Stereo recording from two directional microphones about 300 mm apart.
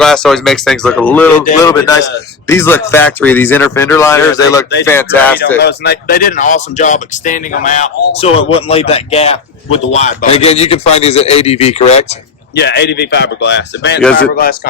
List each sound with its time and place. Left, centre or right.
0.0 s speech: centre
5.6 s a man's voice: left
12.5 s a man's voice: left